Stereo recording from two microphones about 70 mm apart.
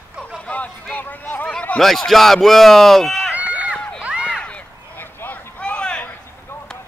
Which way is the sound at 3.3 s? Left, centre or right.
Right.